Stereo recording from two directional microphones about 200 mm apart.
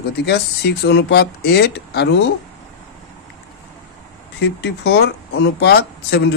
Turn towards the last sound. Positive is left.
turn(degrees=55)  # may be behind; listen again after turning